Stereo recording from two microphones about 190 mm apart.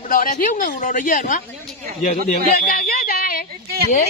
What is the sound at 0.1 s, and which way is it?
Speech, 45° left (ahead or behind).